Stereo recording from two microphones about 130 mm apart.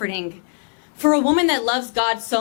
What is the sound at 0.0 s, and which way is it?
A woman's voice, 5° left (ahead or behind).